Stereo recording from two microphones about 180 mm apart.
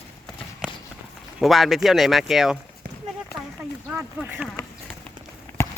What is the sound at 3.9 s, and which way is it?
Speech, 10° right (ahead or behind).